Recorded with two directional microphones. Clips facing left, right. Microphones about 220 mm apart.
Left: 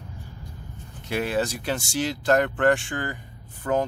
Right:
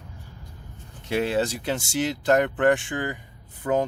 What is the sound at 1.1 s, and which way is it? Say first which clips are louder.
Speech: right 2 dB; 25° right (ahead or behind).